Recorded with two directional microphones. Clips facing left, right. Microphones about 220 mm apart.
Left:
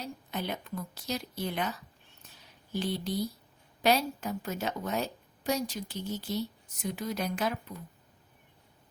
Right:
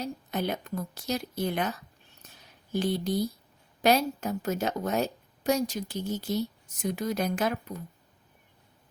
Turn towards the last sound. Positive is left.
turn(degrees=-45)  # may be behind; listen again after turning